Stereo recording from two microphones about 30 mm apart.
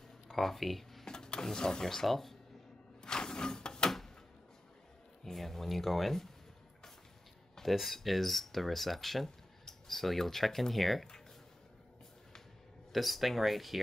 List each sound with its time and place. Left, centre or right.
0.3 s speech: centre
1.0 s speech: left
2.0 s speech: centre
3.0 s a sound: left
5.2 s speech: centre
7.6 s speech: centre
12.9 s speech: centre